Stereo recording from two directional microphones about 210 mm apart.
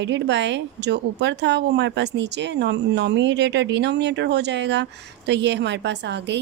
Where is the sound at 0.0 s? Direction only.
55° right (ahead or behind).